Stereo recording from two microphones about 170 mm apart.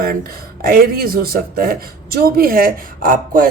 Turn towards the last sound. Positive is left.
turn(degrees=-55)  # may be behind; listen again after turning